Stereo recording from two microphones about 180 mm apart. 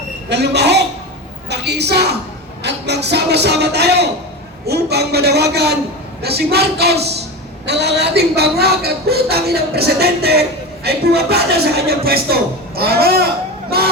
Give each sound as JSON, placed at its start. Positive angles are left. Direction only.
{"t": 0.3, "sound": "a woman's voice", "side_deg": -70}